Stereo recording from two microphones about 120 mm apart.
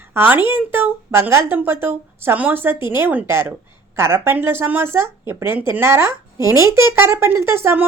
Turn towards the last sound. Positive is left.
turn(degrees=-20)  # may be behind; listen again after turning